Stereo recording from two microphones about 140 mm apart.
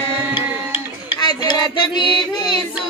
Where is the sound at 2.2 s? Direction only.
30° left (ahead or behind).